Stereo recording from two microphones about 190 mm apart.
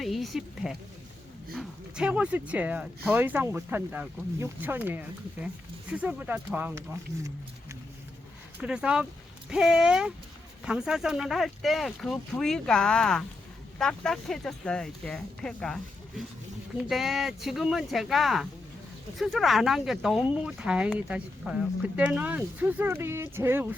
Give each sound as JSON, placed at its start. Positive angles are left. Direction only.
{"t": 0.0, "sound": "speech", "side_deg": 0}
{"t": 8.6, "sound": "speech", "side_deg": -5}